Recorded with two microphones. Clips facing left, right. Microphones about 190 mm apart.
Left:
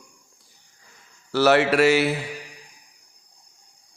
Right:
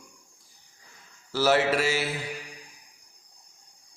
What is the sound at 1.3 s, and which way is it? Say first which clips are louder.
Speech: left 5 dB; 70° left (ahead or behind).